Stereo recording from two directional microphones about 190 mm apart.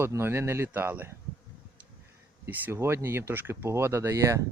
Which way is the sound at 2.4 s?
10° right (ahead or behind).